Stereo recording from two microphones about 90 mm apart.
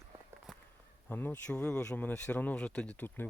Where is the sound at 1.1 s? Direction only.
20° left (ahead or behind).